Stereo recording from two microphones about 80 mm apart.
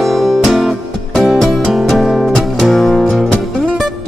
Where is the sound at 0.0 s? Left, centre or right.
Centre.